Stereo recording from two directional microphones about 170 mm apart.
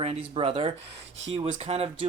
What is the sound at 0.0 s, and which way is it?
Speech, 35° right (ahead or behind).